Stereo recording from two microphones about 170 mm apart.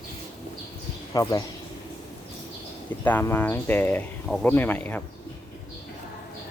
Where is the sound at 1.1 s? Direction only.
20° left (ahead or behind).